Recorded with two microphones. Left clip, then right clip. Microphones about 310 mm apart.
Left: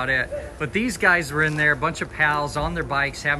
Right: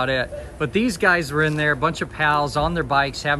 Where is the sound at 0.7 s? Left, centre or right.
Centre.